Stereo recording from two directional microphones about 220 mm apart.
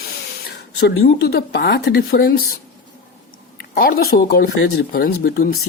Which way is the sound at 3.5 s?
40° left (ahead or behind).